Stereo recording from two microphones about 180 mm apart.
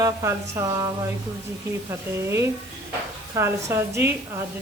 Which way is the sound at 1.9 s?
15° right (ahead or behind).